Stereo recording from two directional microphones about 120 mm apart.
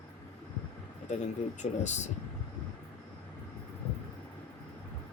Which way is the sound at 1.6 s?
90° left.